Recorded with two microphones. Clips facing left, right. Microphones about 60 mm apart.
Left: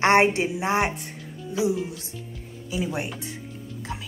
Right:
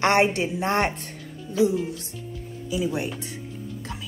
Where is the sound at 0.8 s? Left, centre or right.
Centre.